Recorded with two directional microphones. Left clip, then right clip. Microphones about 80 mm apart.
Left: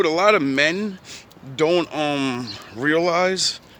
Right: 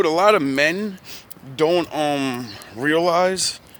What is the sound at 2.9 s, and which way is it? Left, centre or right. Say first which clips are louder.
Speech: right 1 dB; centre.